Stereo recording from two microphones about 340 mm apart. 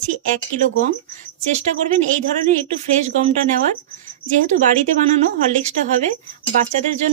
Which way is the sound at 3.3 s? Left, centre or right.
Right.